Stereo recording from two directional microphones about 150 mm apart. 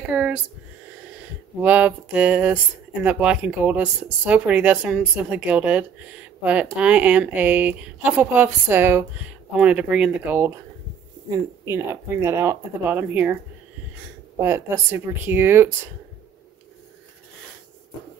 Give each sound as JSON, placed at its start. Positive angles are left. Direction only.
{"t": 0.1, "sound": "a sound", "side_deg": -10}
{"t": 1.6, "sound": "speech", "side_deg": -10}
{"t": 14.4, "sound": "speech", "side_deg": -15}